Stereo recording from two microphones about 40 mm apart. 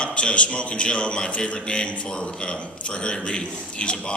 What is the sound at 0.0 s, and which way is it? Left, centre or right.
A man's voice, left.